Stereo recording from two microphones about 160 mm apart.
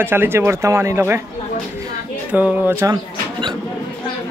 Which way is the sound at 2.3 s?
10° right (ahead or behind).